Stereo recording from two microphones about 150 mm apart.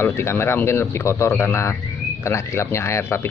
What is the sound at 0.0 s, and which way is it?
Speech, 15° left (ahead or behind).